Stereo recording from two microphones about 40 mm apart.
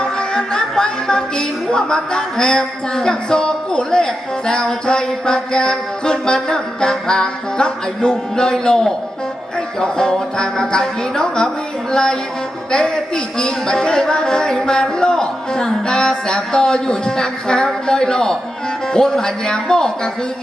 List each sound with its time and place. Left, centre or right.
0.0 s music: centre